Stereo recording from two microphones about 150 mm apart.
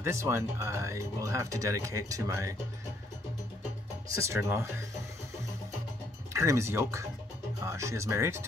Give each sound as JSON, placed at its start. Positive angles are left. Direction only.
{"t": 0.0, "sound": "speech", "side_deg": -20}
{"t": 4.1, "sound": "speech", "side_deg": -20}
{"t": 6.3, "sound": "speech", "side_deg": -20}